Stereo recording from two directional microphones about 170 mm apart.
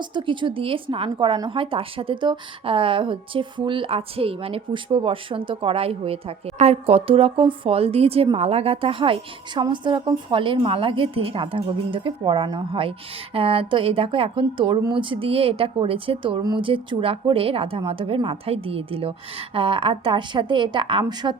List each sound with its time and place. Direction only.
0.0 s a woman's voice: 25° right (ahead or behind)